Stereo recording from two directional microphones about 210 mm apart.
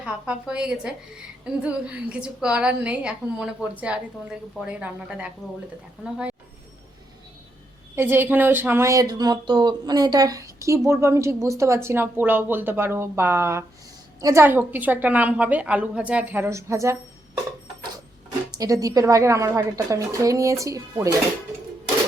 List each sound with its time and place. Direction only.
0.0 s a woman's voice: 5° right (ahead or behind)
7.9 s speech: 10° right (ahead or behind)
18.5 s speech: 15° right (ahead or behind)